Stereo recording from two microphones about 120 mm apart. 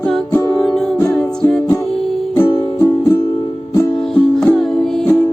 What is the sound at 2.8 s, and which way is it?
Music, 20° left (ahead or behind).